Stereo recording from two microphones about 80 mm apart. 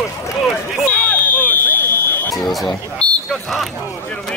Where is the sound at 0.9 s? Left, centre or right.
Centre.